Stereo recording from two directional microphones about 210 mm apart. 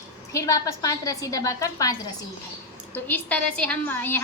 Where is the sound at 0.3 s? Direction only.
15° left (ahead or behind).